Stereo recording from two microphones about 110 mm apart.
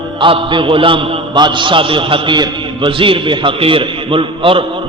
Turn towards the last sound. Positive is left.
turn(degrees=-55)  # may be behind; listen again after turning